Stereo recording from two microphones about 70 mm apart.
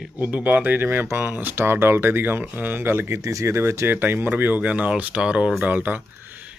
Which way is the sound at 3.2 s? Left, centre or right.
Right.